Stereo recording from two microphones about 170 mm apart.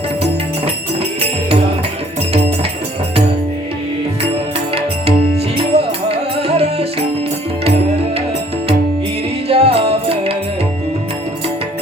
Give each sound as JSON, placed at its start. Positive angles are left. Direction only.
{"t": 4.7, "sound": "music", "side_deg": -35}
{"t": 9.5, "sound": "music", "side_deg": -35}